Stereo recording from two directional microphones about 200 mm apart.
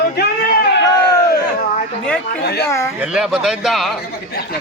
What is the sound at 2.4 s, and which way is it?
Speech, 55° left (ahead or behind).